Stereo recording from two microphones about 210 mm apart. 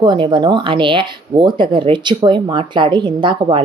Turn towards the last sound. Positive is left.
turn(degrees=-20)  # may be behind; listen again after turning